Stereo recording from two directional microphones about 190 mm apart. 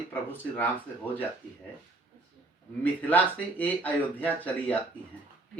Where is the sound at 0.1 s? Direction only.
10° left (ahead or behind).